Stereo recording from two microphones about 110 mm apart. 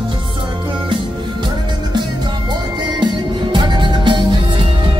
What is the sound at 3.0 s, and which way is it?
Music, 40° right (ahead or behind).